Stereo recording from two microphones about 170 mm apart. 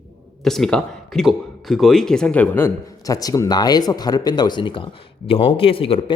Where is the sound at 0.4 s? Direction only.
Centre (ahead or behind).